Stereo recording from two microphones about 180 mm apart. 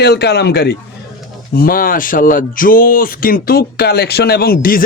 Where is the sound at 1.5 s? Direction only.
55° left (ahead or behind).